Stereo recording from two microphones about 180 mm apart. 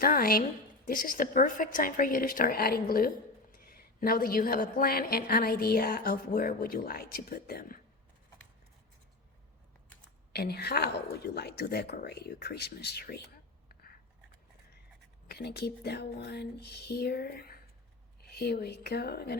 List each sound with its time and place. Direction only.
0.0 s a woman's voice: 55° left (ahead or behind)
10.3 s a woman's voice: 60° left (ahead or behind)
15.3 s a woman's voice: 65° left (ahead or behind)